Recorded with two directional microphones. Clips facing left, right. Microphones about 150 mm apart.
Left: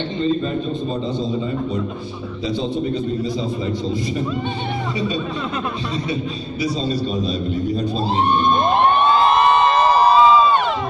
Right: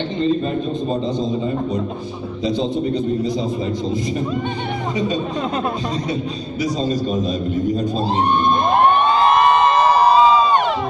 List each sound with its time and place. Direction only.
6.6 s a man's voice: 45° right (ahead or behind)
9.8 s crowd: 15° right (ahead or behind)